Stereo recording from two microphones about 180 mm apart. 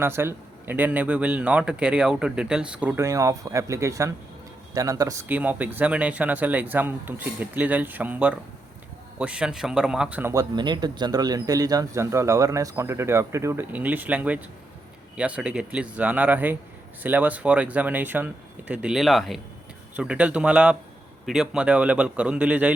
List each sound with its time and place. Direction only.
0.0 s a man's voice: 15° right (ahead or behind)
10.5 s a man's voice: 25° right (ahead or behind); by 22.7 s 5° right (ahead or behind)